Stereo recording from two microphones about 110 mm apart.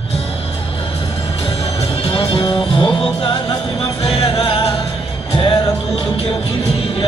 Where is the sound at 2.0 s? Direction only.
45° left (ahead or behind).